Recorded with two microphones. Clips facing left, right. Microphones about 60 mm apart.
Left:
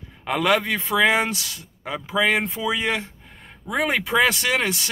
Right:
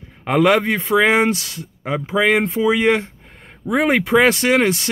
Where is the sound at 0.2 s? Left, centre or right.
Right.